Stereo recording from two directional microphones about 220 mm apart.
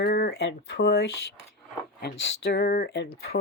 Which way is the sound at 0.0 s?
50° left (ahead or behind).